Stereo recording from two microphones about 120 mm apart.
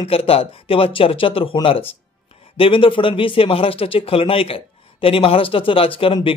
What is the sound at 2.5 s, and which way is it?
Speech, 50° left (ahead or behind).